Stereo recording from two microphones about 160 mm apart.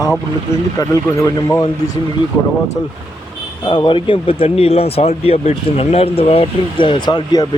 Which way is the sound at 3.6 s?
25° left (ahead or behind).